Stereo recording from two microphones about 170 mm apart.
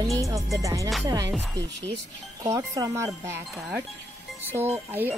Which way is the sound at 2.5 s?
20° right (ahead or behind).